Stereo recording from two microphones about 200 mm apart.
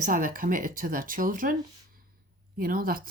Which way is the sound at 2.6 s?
45° right (ahead or behind).